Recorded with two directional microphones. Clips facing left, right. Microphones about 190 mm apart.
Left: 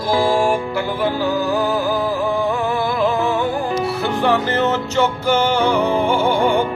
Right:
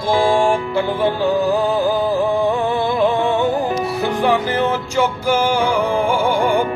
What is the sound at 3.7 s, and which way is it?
Music, 15° right (ahead or behind).